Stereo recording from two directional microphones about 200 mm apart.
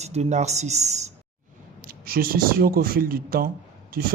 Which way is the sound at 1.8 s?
45° right (ahead or behind).